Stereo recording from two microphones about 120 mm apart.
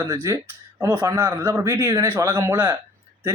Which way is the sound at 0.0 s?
25° right (ahead or behind).